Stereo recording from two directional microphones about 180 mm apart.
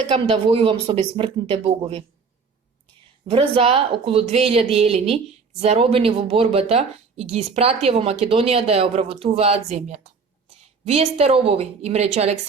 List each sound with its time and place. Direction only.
0.1 s speech: 30° right (ahead or behind)
3.2 s speech: 30° right (ahead or behind)